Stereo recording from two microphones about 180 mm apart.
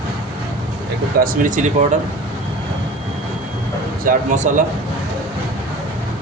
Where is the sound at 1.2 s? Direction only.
45° right (ahead or behind).